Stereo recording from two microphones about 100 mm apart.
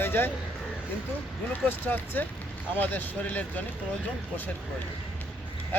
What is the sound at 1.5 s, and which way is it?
Speech, 20° left (ahead or behind).